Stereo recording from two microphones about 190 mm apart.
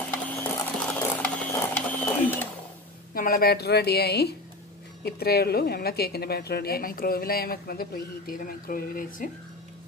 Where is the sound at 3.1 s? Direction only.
50° left (ahead or behind).